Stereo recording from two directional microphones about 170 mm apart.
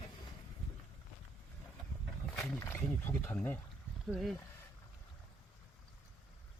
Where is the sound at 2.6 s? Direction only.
10° left (ahead or behind).